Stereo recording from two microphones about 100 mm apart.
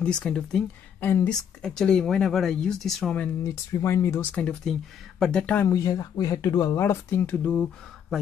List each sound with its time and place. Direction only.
0.0 s speech: 10° left (ahead or behind)
1.0 s speech: 20° left (ahead or behind)
1.6 s speech: 5° left (ahead or behind)
3.4 s speech: 30° left (ahead or behind)
4.3 s speech: 10° left (ahead or behind)
5.7 s speech: 35° left (ahead or behind)
6.7 s speech: 25° left (ahead or behind)